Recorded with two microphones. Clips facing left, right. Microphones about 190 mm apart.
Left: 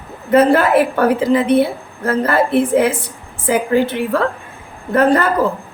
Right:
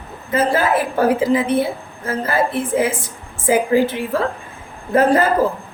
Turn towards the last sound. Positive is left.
turn(degrees=65)  # may be behind; listen again after turning